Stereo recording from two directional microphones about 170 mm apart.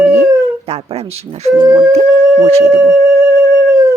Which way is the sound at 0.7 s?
35° right (ahead or behind).